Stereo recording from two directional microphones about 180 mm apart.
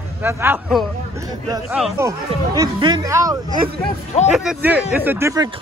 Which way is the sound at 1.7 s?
Centre (ahead or behind).